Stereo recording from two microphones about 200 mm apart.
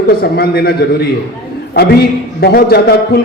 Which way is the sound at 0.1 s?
50° left (ahead or behind).